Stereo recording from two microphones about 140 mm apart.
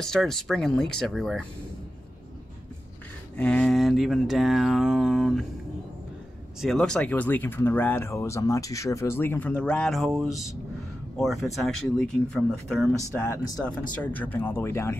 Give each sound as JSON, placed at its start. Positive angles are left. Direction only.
{"t": 0.0, "sound": "speech", "side_deg": 5}
{"t": 3.3, "sound": "speech", "side_deg": 5}
{"t": 6.6, "sound": "speech", "side_deg": 0}
{"t": 13.1, "sound": "speech", "side_deg": 20}